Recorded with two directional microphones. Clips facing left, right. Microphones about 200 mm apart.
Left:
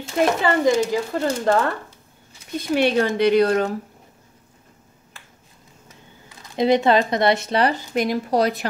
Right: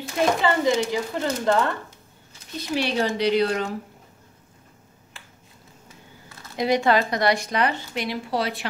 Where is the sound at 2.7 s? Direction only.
55° left (ahead or behind).